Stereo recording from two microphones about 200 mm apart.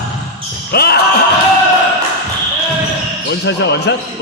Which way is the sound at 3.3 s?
60° left (ahead or behind).